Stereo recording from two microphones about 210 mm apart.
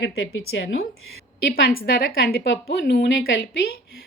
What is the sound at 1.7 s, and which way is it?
A woman's voice, 45° left (ahead or behind).